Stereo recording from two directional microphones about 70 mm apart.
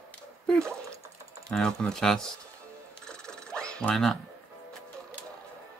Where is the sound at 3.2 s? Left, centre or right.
Centre.